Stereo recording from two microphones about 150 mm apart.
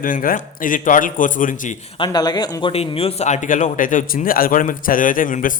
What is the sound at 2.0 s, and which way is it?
Speech, 30° left (ahead or behind).